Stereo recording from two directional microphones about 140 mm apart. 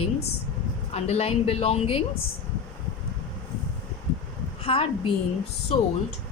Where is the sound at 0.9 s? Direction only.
45° left (ahead or behind).